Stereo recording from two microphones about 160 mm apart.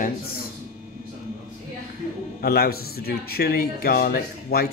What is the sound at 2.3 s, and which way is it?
Speech, 75° left (ahead or behind).